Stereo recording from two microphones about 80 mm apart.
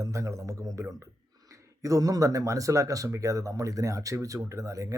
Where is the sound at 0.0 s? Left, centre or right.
Right.